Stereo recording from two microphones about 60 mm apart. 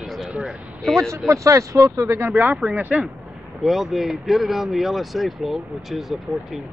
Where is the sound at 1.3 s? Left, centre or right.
Right.